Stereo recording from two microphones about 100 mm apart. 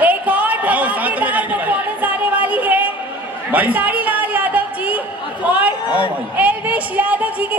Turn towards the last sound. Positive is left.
turn(degrees=-15)  # may be behind; listen again after turning